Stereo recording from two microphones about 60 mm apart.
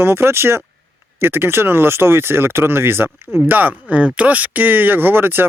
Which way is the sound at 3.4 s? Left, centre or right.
Right.